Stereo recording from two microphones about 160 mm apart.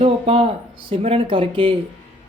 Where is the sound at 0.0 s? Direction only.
35° right (ahead or behind).